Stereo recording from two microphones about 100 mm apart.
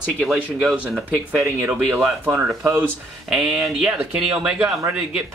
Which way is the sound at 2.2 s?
20° right (ahead or behind).